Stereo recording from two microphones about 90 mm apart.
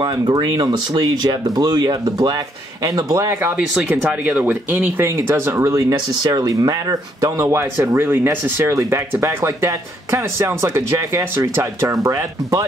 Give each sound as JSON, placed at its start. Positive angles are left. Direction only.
{"t": 0.0, "sound": "speech", "side_deg": -50}
{"t": 3.5, "sound": "speech", "side_deg": -20}